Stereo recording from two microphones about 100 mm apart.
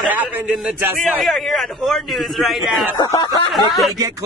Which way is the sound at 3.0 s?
30° left (ahead or behind).